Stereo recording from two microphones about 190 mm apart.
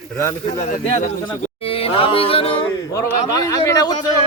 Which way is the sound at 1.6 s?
30° left (ahead or behind).